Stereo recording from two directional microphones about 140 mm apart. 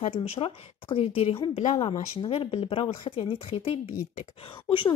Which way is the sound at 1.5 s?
55° left (ahead or behind).